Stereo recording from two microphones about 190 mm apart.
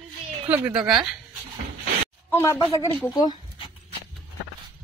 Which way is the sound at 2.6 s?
25° left (ahead or behind).